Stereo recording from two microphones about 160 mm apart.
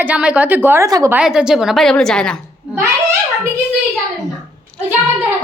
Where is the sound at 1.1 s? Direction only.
5° right (ahead or behind).